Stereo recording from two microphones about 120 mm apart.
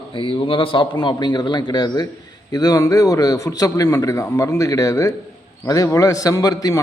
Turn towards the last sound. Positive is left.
turn(degrees=30)  # may be behind; listen again after turning